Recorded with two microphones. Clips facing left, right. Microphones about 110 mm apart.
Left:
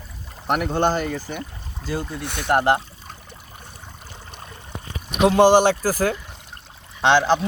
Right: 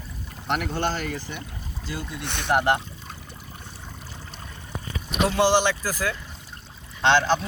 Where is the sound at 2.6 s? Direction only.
30° left (ahead or behind).